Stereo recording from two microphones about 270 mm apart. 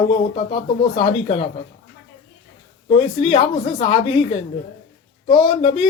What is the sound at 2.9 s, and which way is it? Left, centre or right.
Speech, centre.